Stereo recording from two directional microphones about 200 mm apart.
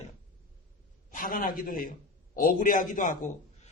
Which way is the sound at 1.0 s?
45° left (ahead or behind).